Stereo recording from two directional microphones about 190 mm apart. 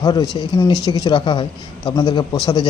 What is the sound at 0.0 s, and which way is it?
Speech, 20° left (ahead or behind).